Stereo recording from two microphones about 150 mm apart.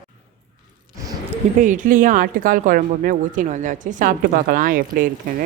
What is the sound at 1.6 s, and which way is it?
Speech, 60° right (ahead or behind).